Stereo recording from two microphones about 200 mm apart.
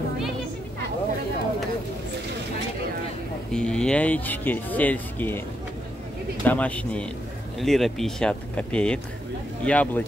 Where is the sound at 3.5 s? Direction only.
5° left (ahead or behind).